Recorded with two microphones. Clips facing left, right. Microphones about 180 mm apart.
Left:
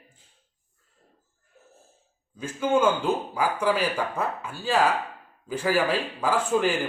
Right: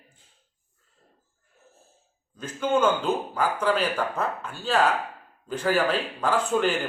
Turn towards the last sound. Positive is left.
turn(degrees=10)  # may be behind; listen again after turning